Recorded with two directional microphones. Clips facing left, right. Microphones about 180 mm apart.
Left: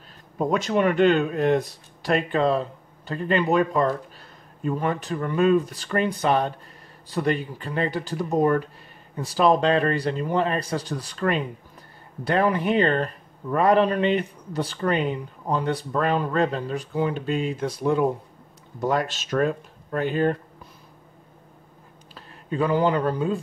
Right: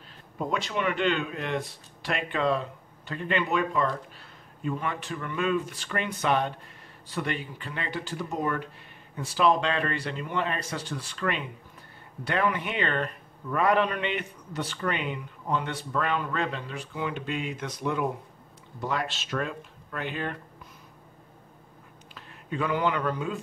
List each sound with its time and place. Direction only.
0.4 s a man's voice: 45° left (ahead or behind)
18.8 s speech: 45° left (ahead or behind)
22.1 s speech: 35° left (ahead or behind)